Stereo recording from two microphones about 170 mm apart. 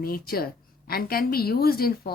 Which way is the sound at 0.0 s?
60° left (ahead or behind).